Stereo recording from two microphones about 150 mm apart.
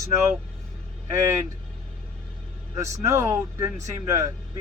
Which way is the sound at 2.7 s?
20° right (ahead or behind).